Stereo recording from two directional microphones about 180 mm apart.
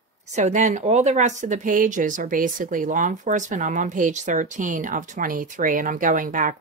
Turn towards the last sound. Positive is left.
turn(degrees=-50)  # may be behind; listen again after turning